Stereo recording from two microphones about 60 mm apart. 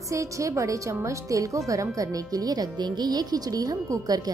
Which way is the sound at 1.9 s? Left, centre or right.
Right.